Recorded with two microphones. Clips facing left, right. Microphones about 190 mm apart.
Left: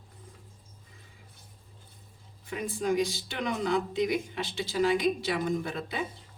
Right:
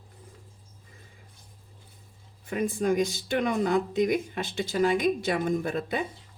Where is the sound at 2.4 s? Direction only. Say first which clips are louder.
Right 5 dB; 50° right (ahead or behind).